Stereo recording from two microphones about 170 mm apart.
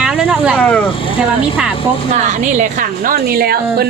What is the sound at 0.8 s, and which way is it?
Speech, 30° left (ahead or behind).